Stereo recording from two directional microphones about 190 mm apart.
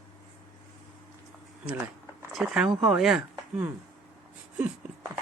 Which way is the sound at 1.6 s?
5° right (ahead or behind).